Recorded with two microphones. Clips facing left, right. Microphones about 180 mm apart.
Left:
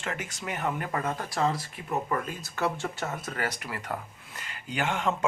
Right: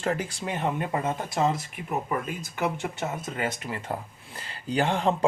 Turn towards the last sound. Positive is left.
turn(degrees=-35)  # may be behind; listen again after turning